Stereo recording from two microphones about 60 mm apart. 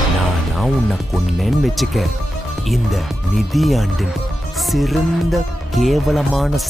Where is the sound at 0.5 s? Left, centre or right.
Centre.